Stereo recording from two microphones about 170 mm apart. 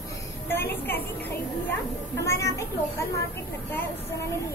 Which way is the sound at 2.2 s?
15° left (ahead or behind).